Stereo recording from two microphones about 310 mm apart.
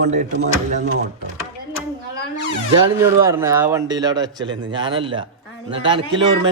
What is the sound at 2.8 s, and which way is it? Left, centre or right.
A man's voice, centre.